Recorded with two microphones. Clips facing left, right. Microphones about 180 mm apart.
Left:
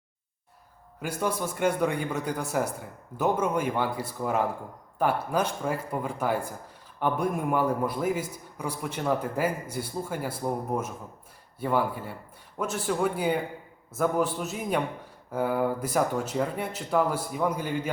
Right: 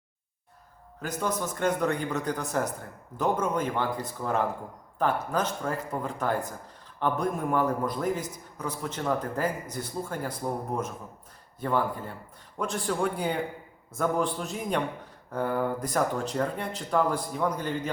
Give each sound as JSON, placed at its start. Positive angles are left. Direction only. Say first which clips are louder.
{"t": 1.0, "sound": "a man's voice", "louder": "left 1 dB", "side_deg": 10}